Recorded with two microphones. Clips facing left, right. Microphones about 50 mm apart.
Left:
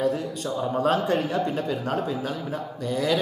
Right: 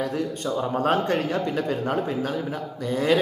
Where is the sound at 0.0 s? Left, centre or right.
Centre.